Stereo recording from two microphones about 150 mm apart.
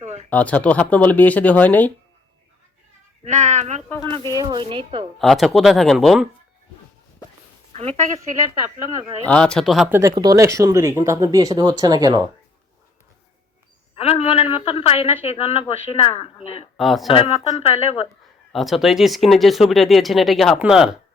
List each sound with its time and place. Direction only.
0.0 s a sound: 45° right (ahead or behind)
0.3 s speech: 10° left (ahead or behind)
3.2 s speech: 50° right (ahead or behind)
3.8 s speech: 15° left (ahead or behind)
4.3 s speech: 25° right (ahead or behind)
5.2 s speech: centre (ahead or behind)
7.7 s a woman's voice: 50° right (ahead or behind)
9.2 s speech: 10° left (ahead or behind)
9.9 s speech: 20° right (ahead or behind)
13.9 s speech: 40° left (ahead or behind)
16.7 s speech: centre (ahead or behind)
17.1 s speech: 40° left (ahead or behind)
18.5 s speech: centre (ahead or behind)